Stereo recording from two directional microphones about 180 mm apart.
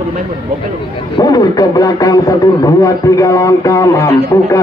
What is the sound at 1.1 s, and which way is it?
Speech, 20° left (ahead or behind).